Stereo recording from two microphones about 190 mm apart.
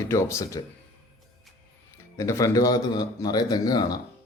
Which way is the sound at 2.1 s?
15° left (ahead or behind).